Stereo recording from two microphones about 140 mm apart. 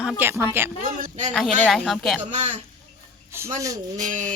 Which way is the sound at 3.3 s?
20° right (ahead or behind).